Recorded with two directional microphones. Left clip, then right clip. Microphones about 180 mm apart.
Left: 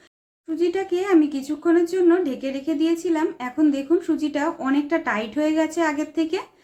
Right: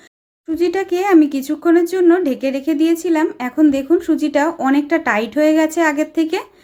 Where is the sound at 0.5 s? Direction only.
45° right (ahead or behind).